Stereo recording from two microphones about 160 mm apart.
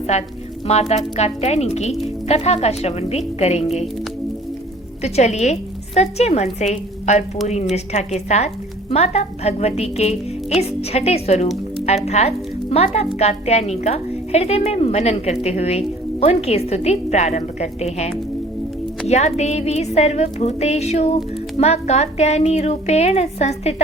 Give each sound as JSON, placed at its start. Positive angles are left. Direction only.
{"t": 0.1, "sound": "a woman's voice", "side_deg": 45}
{"t": 5.0, "sound": "a woman's voice", "side_deg": 45}